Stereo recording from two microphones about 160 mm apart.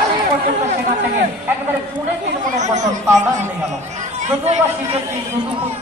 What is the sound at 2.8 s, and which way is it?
Speech, 20° right (ahead or behind).